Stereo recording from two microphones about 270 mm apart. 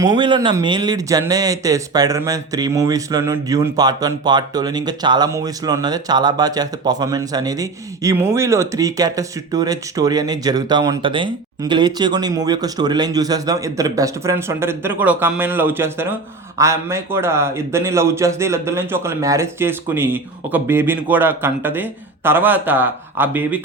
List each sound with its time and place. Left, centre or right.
0.2 s a man's voice: centre